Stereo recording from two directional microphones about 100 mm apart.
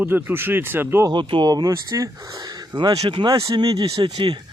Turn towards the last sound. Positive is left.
turn(degrees=-45)  # may be behind; listen again after turning